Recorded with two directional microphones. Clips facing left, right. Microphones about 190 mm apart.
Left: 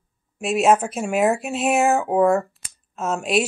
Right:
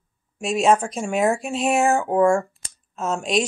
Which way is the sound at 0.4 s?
5° left (ahead or behind).